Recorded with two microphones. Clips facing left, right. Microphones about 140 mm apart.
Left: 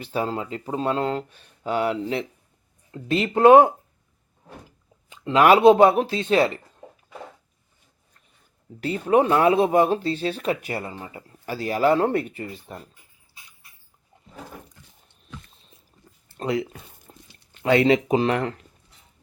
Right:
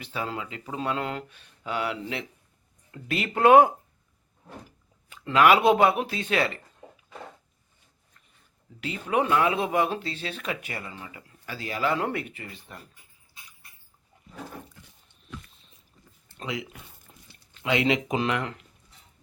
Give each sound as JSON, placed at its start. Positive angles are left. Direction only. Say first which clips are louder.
{"t": 0.0, "sound": "speech", "louder": "left 6 dB", "side_deg": 40}
{"t": 2.9, "sound": "speech", "louder": "left 7 dB", "side_deg": 25}
{"t": 5.0, "sound": "a sound", "louder": "left 5 dB", "side_deg": 25}
{"t": 5.5, "sound": "speech", "louder": "left 6 dB", "side_deg": 30}
{"t": 8.8, "sound": "speech", "louder": "left 7 dB", "side_deg": 40}
{"t": 16.4, "sound": "speech", "louder": "left 9 dB", "side_deg": 40}
{"t": 17.1, "sound": "a sound", "louder": "left 6 dB", "side_deg": 35}
{"t": 17.6, "sound": "speech", "louder": "left 7 dB", "side_deg": 40}